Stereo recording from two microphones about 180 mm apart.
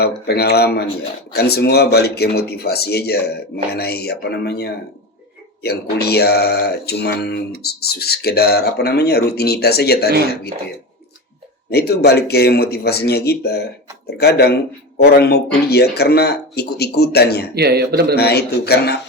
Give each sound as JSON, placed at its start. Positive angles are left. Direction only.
{"t": 0.0, "sound": "speech", "side_deg": 65}
{"t": 11.7, "sound": "speech", "side_deg": 65}
{"t": 17.5, "sound": "speech", "side_deg": -60}
{"t": 18.2, "sound": "speech", "side_deg": 65}